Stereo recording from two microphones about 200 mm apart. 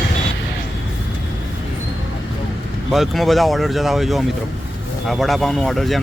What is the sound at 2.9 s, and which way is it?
Speech, centre (ahead or behind).